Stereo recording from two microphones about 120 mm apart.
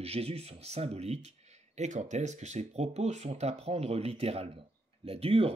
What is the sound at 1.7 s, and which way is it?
Speech, 80° right.